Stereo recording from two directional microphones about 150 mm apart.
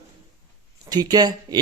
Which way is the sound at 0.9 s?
25° right (ahead or behind).